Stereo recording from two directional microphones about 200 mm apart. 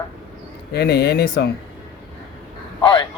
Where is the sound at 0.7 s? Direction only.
55° left (ahead or behind).